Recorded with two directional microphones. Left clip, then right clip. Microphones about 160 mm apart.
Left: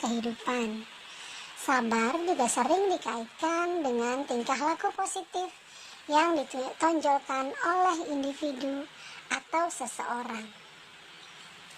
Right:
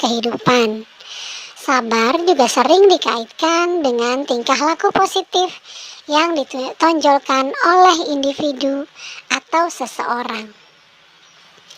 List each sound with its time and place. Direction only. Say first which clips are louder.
0.0 s speech: right 15 dB; 30° right (ahead or behind)
1.2 s speech: right 11 dB; 30° right (ahead or behind)